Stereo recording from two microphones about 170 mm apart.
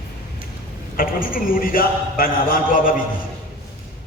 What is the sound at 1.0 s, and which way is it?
A man's voice, 55° left (ahead or behind).